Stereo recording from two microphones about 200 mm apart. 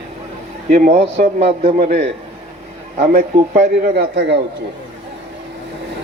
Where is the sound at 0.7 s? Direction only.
35° right (ahead or behind).